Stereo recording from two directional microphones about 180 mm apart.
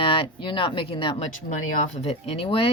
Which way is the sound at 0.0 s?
30° left (ahead or behind).